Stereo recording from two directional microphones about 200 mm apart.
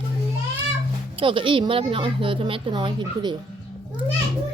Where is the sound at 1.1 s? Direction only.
25° right (ahead or behind).